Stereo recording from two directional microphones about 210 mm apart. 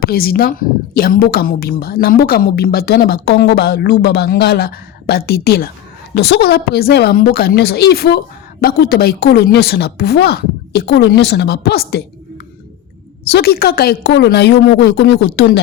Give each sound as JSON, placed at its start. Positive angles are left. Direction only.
{"t": 0.0, "sound": "a woman's voice", "side_deg": 45}
{"t": 13.3, "sound": "a woman's voice", "side_deg": 50}